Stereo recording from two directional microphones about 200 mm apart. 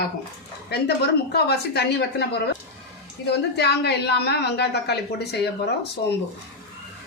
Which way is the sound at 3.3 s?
55° left (ahead or behind).